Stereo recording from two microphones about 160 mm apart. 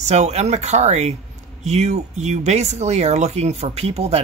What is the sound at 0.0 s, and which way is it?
Speech, 45° right (ahead or behind).